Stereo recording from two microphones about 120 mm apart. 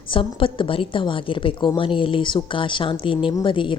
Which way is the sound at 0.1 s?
45° left (ahead or behind).